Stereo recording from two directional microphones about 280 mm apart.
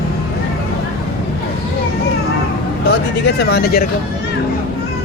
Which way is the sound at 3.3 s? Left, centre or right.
Left.